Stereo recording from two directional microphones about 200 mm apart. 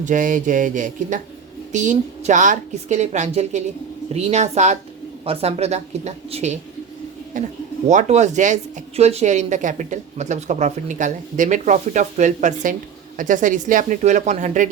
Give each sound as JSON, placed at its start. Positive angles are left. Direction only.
{"t": 0.0, "sound": "speech", "side_deg": -40}